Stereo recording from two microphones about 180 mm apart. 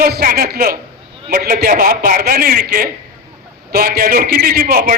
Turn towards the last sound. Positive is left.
turn(degrees=-55)  # may be behind; listen again after turning